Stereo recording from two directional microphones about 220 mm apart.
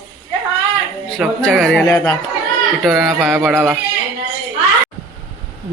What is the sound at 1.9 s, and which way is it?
Speech, 15° left (ahead or behind).